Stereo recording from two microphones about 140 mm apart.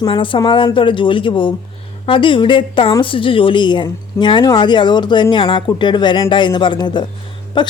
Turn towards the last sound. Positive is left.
turn(degrees=35)  # may be behind; listen again after turning